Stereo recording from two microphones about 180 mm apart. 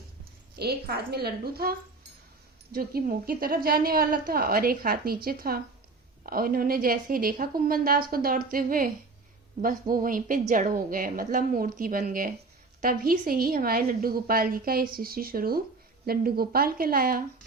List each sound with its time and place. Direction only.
0.5 s a woman's voice: 60° right (ahead or behind)
2.7 s a woman's voice: 55° right (ahead or behind)
9.9 s a woman's voice: 50° right (ahead or behind)